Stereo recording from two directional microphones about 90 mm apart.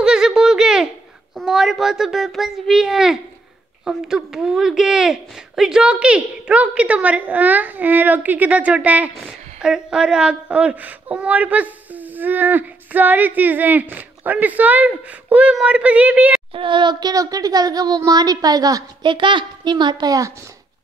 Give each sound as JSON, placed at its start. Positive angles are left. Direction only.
{"t": 0.0, "sound": "a sound", "side_deg": -5}
{"t": 1.4, "sound": "a child's voice", "side_deg": -5}
{"t": 16.5, "sound": "a woman's voice", "side_deg": -65}
{"t": 17.1, "sound": "a woman's voice", "side_deg": -40}
{"t": 19.0, "sound": "a woman's voice", "side_deg": -65}